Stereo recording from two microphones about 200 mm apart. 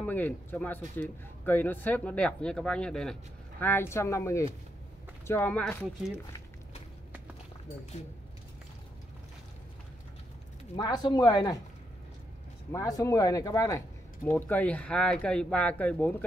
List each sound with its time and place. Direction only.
0.0 s a man's voice: 10° left (ahead or behind)
10.8 s speech: 20° left (ahead or behind)
12.7 s a man's voice: 15° left (ahead or behind)